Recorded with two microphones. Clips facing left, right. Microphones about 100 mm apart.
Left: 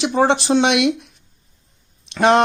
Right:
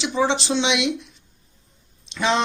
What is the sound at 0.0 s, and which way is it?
Speech, 55° left (ahead or behind).